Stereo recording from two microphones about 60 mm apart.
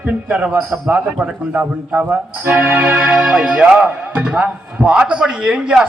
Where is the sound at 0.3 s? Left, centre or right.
Right.